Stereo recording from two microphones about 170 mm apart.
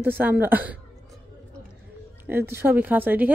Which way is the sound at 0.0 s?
10° right (ahead or behind).